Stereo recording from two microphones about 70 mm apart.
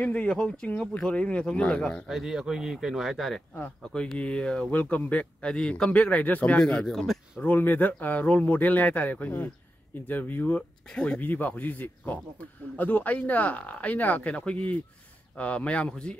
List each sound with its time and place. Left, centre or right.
0.0 s speech: left
2.0 s speech: centre
3.9 s speech: centre
6.6 s speech: centre
7.3 s speech: left
10.9 s speech: centre
11.2 s speech: left; by 16.2 s centre